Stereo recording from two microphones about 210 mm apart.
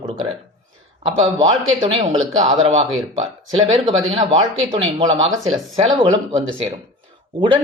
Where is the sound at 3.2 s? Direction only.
30° right (ahead or behind).